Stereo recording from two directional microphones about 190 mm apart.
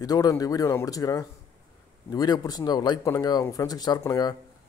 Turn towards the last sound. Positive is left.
turn(degrees=20)  # may be behind; listen again after turning